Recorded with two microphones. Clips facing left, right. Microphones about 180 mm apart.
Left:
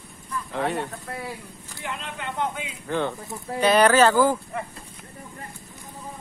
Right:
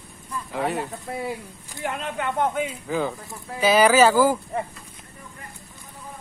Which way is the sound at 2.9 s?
5° right (ahead or behind).